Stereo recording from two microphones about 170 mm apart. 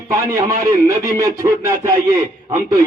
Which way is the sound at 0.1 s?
20° right (ahead or behind).